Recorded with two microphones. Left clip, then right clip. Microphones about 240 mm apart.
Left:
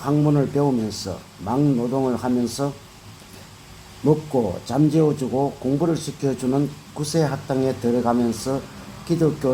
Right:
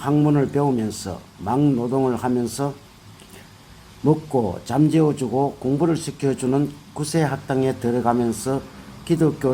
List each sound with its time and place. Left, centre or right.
0.0 s speech: right
0.9 s speech: right
1.5 s speech: right
2.5 s speech: right
4.0 s speech: right
7.0 s speech: right
7.3 s speech: right